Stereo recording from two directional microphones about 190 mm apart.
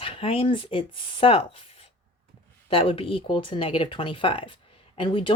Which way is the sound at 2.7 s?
30° left (ahead or behind).